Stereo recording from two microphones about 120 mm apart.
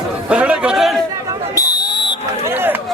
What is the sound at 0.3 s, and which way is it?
Chatter, 10° right (ahead or behind).